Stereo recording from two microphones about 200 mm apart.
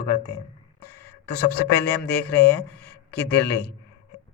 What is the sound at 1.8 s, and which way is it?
Speech, 5° left (ahead or behind).